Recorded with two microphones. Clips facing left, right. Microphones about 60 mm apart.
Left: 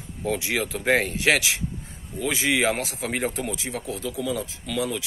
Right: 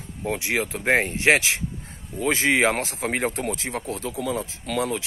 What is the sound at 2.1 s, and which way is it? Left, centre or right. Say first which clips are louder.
Speech: right 3 dB; right.